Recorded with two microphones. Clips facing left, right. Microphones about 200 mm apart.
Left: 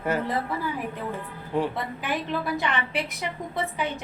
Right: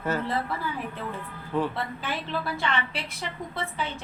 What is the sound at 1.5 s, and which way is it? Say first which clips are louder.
Speech: left 1 dB; 15° left (ahead or behind).